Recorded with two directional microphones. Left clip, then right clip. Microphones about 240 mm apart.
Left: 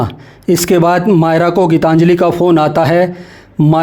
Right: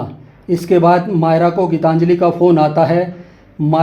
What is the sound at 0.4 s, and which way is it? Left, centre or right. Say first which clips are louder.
Speech: left 1 dB; left.